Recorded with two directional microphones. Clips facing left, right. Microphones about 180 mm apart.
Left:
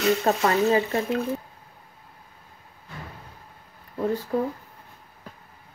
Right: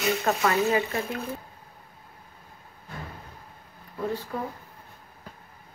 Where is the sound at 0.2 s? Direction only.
30° left (ahead or behind).